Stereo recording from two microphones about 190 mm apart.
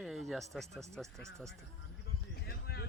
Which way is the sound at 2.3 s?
55° left (ahead or behind).